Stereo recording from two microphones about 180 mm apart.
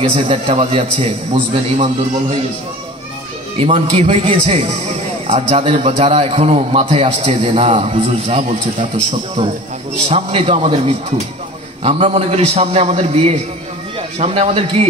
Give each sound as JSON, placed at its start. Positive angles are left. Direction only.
{"t": 0.1, "sound": "a man's voice", "side_deg": -30}
{"t": 3.5, "sound": "a man's voice", "side_deg": -35}